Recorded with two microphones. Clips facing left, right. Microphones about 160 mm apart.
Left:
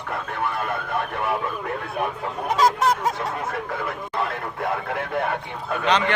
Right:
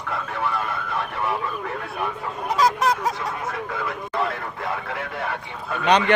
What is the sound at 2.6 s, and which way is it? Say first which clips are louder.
Honk: even; 25° left (ahead or behind).